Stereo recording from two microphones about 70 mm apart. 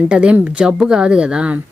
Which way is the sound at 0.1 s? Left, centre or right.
Centre.